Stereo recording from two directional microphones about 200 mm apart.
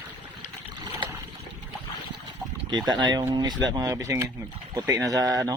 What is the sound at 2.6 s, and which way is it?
Speech, 20° right (ahead or behind).